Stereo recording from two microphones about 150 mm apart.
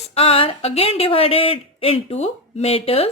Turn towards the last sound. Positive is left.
turn(degrees=40)  # may be behind; listen again after turning